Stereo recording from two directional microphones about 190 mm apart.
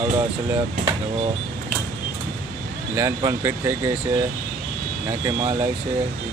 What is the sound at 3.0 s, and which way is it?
Speech, 15° right (ahead or behind).